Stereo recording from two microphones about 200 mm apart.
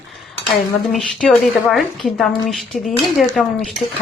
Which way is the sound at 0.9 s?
5° left (ahead or behind).